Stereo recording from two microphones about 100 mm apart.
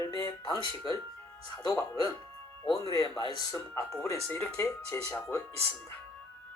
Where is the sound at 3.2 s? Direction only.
50° left (ahead or behind).